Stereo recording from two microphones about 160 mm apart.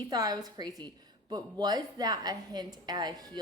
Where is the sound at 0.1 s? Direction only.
25° right (ahead or behind).